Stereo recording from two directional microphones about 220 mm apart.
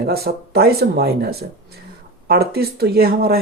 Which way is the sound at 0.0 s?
45° right (ahead or behind).